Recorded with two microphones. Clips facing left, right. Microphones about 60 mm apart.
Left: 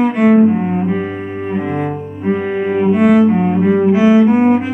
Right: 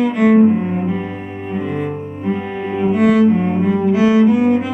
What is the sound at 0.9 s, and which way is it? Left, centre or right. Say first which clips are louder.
Cello: left 4 dB; left.